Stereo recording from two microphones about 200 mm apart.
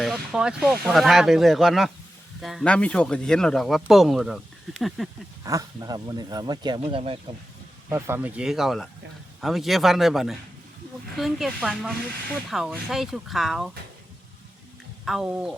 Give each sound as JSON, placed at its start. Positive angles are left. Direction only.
{"t": 0.0, "sound": "speech", "side_deg": 0}
{"t": 5.4, "sound": "speech", "side_deg": -15}
{"t": 7.9, "sound": "speech", "side_deg": -10}
{"t": 15.0, "sound": "speech", "side_deg": 0}